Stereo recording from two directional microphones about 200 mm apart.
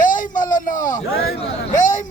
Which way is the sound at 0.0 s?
40° left (ahead or behind).